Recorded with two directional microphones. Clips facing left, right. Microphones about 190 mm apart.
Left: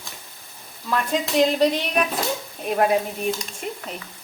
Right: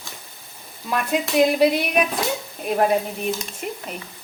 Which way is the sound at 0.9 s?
15° right (ahead or behind).